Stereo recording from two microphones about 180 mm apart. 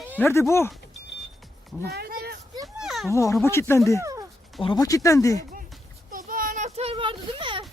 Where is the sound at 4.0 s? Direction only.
20° right (ahead or behind).